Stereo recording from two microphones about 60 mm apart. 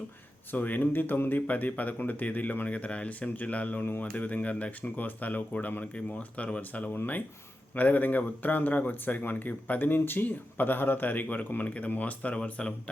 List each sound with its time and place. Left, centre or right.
0.5 s speech: left